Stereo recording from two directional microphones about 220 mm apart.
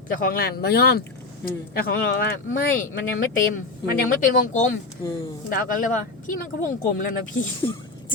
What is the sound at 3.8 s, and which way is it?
Speech, 40° left (ahead or behind).